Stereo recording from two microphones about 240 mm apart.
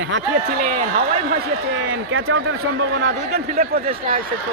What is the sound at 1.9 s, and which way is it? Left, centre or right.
A man's voice, right.